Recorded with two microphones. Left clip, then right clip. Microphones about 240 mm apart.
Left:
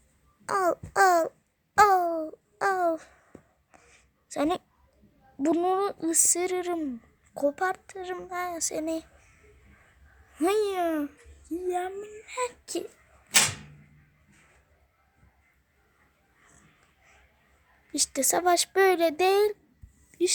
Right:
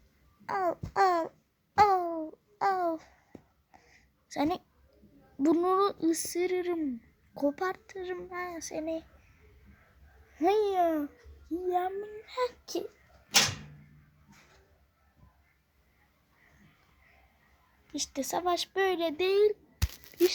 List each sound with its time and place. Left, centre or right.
0.4 s speech: left
1.7 s babbling: centre
3.3 s a sound: centre
3.7 s a sound: centre
5.4 s child singing: centre
10.3 s a child's voice: centre
17.9 s speech: left
20.1 s wail: left